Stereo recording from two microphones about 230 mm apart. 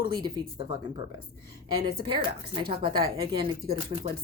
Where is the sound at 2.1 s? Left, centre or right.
Right.